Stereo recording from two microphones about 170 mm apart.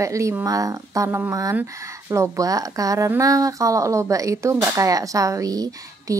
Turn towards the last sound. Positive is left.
turn(degrees=-20)  # may be behind; listen again after turning